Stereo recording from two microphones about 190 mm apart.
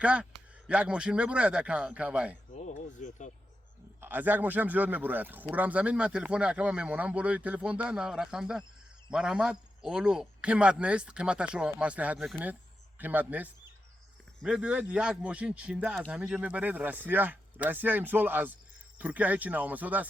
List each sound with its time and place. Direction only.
0.0 s a man's voice: 5° right (ahead or behind)
2.5 s a sound: 40° left (ahead or behind)
4.0 s a man's voice: 10° right (ahead or behind)